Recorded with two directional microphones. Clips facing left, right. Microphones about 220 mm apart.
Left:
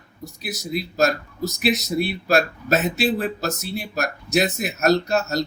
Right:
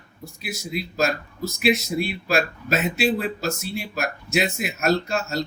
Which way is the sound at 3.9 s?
40° left (ahead or behind).